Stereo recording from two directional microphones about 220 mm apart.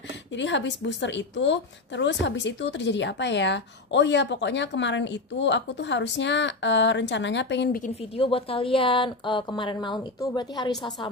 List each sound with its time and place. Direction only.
0.3 s a woman's voice: 55° left (ahead or behind)
7.8 s a woman's voice: 25° left (ahead or behind)